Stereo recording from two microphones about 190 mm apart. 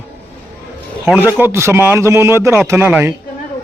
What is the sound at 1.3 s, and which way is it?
A man's voice, 10° right (ahead or behind).